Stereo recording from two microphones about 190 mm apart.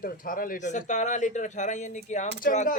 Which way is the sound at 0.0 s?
45° left (ahead or behind).